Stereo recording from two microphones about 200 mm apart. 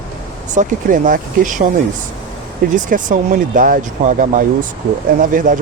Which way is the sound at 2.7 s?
40° right (ahead or behind).